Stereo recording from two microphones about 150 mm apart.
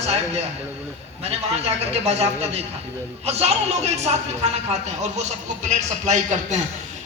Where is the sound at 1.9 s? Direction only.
45° right (ahead or behind).